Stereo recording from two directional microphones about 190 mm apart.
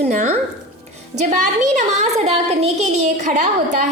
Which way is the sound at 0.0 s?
40° right (ahead or behind).